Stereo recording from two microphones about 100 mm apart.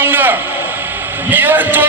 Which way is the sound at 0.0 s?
20° right (ahead or behind).